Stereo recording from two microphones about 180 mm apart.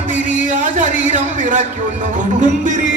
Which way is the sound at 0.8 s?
45° right (ahead or behind).